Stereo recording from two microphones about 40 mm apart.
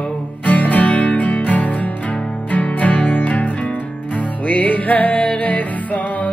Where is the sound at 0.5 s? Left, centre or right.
Left.